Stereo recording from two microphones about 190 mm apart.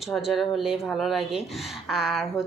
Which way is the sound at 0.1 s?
Centre (ahead or behind).